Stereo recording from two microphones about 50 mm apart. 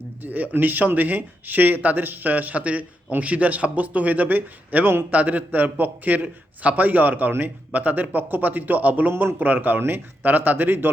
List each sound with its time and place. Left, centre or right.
0.2 s speech: right